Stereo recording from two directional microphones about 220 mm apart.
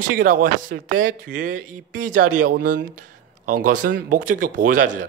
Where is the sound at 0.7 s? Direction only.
55° right (ahead or behind).